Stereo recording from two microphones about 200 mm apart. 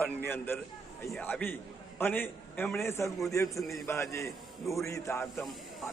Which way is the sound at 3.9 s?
15° left (ahead or behind).